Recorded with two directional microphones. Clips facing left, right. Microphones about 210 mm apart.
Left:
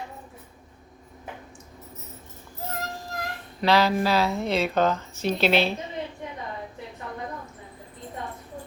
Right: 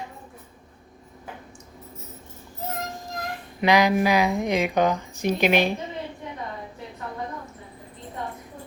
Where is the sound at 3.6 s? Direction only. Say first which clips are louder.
Right 2 dB; 15° right (ahead or behind).